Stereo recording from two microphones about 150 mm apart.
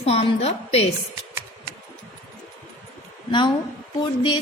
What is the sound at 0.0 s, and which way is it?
Speech, 45° left (ahead or behind).